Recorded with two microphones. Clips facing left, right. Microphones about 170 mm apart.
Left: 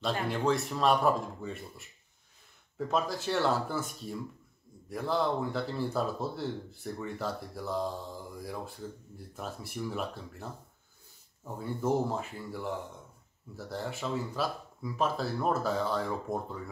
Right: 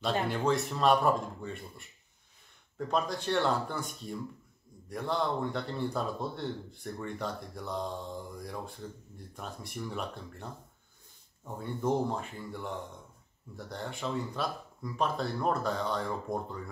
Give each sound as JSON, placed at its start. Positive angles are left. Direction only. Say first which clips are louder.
{"t": 0.3, "sound": "speech", "louder": "even", "side_deg": 0}
{"t": 2.9, "sound": "speech", "louder": "even", "side_deg": 5}